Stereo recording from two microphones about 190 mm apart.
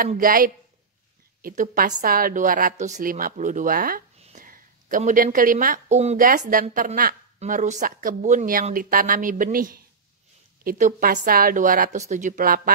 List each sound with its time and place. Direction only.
0.0 s a woman's voice: 45° right (ahead or behind)
4.2 s a sound: 40° right (ahead or behind)
6.2 s a woman's voice: 45° right (ahead or behind)